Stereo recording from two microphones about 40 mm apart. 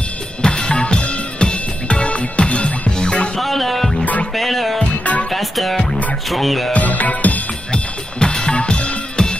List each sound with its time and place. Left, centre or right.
0.4 s music: left
3.3 s music: centre
4.0 s music: left
4.4 s music: centre
6.3 s speech: centre
6.7 s music: left
7.7 s drum kit: left